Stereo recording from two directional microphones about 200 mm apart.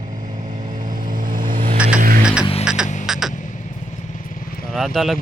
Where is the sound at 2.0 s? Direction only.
45° right (ahead or behind).